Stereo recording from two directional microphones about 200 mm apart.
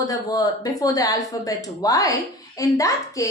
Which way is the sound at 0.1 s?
20° left (ahead or behind).